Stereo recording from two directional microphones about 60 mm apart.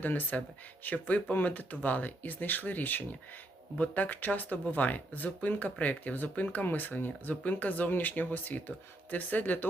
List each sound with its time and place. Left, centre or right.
0.0 s speech: left